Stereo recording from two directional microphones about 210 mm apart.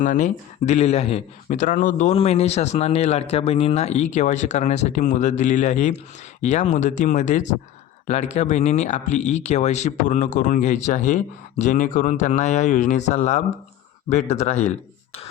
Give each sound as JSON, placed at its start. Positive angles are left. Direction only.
{"t": 0.0, "sound": "speech", "side_deg": 35}